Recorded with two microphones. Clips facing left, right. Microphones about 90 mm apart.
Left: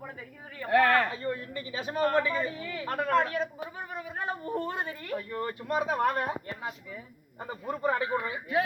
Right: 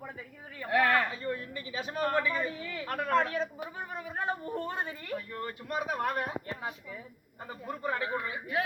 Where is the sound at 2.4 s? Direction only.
20° left (ahead or behind).